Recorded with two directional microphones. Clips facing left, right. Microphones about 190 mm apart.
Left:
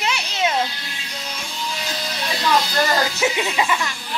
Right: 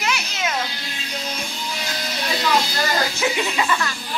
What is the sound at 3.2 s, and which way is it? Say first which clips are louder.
Music: left 1 dB; 20° left (ahead or behind).